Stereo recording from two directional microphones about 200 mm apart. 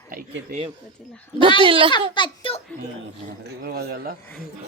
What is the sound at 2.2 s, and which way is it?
Speech, 25° left (ahead or behind).